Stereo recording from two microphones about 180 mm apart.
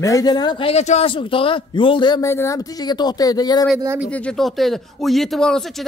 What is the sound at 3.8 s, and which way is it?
Speech, 15° right (ahead or behind).